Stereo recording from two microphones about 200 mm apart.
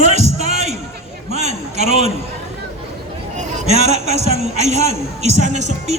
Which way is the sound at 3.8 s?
35° right (ahead or behind).